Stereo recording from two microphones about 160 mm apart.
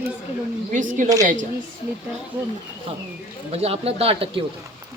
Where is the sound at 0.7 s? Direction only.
55° right (ahead or behind).